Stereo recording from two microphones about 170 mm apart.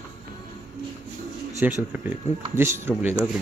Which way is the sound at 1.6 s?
10° right (ahead or behind).